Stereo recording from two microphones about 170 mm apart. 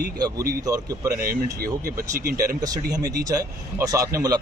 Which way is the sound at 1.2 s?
60° right (ahead or behind).